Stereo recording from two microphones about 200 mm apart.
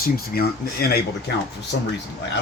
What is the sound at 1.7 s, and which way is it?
Speech, 60° left (ahead or behind).